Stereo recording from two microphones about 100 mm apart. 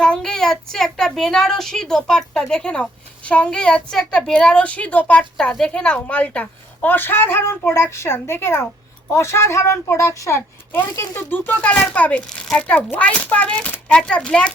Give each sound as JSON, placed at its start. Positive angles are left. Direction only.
{"t": 0.0, "sound": "a child's voice", "side_deg": 5}